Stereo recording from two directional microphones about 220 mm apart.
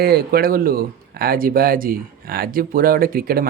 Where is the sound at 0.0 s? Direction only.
45° right (ahead or behind).